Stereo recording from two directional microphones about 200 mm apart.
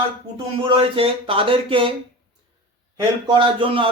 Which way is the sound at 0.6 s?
25° right (ahead or behind).